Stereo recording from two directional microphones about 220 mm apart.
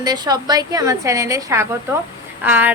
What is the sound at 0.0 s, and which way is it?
A woman's voice, 15° right (ahead or behind).